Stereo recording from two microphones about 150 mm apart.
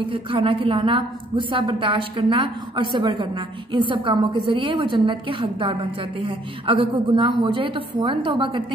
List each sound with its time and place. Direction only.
0.0 s a woman's voice: 35° right (ahead or behind)